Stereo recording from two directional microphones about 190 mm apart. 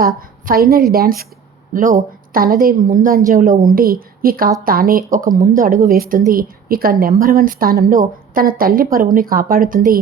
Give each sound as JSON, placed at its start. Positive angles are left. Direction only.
{"t": 0.2, "sound": "speech", "side_deg": -50}